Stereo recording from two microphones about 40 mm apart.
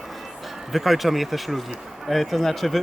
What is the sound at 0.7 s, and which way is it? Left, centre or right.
Speech, centre.